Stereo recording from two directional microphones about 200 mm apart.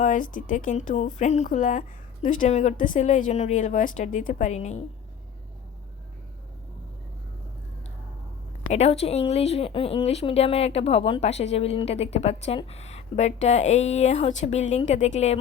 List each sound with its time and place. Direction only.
0.0 s speech: 40° left (ahead or behind)
8.7 s speech: 30° left (ahead or behind)